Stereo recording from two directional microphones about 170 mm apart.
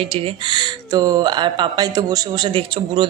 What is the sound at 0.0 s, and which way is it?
Speech, 30° right (ahead or behind).